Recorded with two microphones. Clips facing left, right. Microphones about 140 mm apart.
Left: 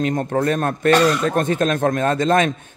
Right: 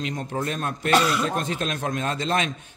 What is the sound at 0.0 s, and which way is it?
A man's voice, 50° left (ahead or behind).